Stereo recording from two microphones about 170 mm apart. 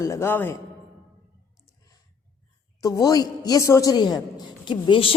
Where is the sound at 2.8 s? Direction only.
20° left (ahead or behind).